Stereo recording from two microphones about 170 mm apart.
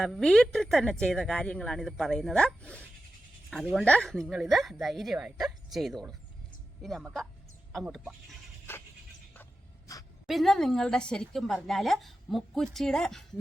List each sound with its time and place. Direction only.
0.0 s a woman's voice: centre (ahead or behind)
8.7 s a sound: 15° left (ahead or behind)
9.3 s music: 15° left (ahead or behind)
10.2 s a woman's voice: centre (ahead or behind)